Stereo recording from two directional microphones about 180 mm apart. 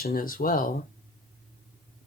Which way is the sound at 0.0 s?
55° left (ahead or behind).